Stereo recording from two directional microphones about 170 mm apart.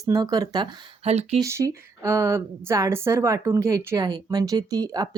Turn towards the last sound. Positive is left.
turn(degrees=-25)  # may be behind; listen again after turning